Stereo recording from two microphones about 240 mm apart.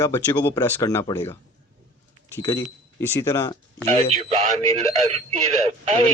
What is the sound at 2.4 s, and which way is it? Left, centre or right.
Speech, centre.